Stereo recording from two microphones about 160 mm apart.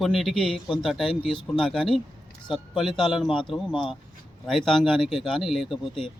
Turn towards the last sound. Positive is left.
turn(degrees=0)  # may be behind; listen again after turning